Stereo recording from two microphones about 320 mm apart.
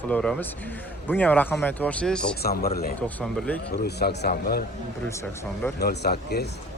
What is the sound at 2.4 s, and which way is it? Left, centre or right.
Speech, left.